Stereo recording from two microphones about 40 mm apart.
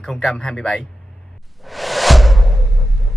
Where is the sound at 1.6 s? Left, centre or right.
Centre.